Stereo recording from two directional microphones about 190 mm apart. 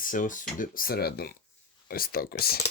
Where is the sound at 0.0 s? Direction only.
45° left (ahead or behind).